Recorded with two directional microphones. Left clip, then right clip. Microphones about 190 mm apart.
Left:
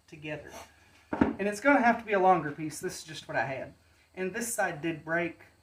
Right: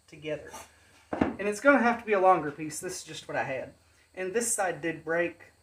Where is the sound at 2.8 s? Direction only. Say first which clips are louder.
Even; 20° right (ahead or behind).